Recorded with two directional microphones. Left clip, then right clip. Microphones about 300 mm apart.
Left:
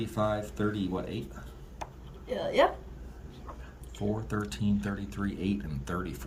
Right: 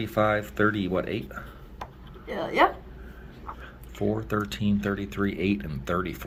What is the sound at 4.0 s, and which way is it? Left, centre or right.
Speech, centre.